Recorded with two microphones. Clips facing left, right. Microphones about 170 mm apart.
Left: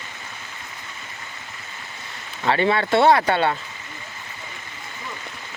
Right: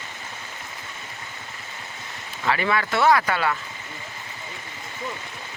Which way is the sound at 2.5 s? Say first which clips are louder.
Left 4 dB; 30° left (ahead or behind).